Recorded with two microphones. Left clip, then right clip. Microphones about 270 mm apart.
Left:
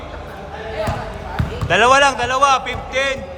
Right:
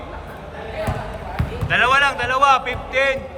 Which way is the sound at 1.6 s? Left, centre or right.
Centre.